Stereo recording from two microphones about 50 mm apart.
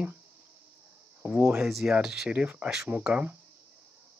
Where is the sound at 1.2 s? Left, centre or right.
Right.